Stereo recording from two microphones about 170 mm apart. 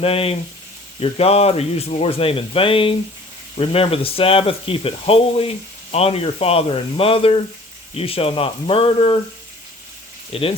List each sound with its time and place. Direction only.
0.0 s speech: 35° left (ahead or behind)
10.3 s speech: 35° left (ahead or behind)